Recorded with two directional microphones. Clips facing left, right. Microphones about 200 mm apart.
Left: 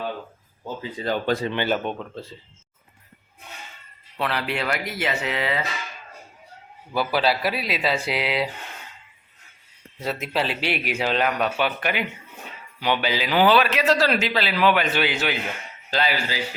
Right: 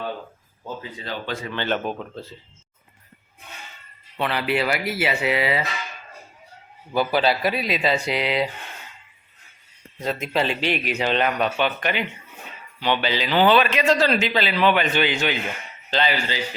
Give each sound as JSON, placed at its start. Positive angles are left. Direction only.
{"t": 1.0, "sound": "speech", "side_deg": 40}
{"t": 1.6, "sound": "a man's voice", "side_deg": 0}
{"t": 4.2, "sound": "speech", "side_deg": 0}
{"t": 6.9, "sound": "a man's voice", "side_deg": 0}
{"t": 10.0, "sound": "a man's voice", "side_deg": 5}